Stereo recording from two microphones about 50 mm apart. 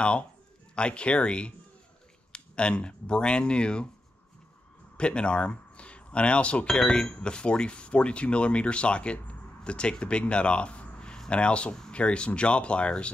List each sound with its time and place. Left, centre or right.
0.7 s speech: left
4.9 s speech: left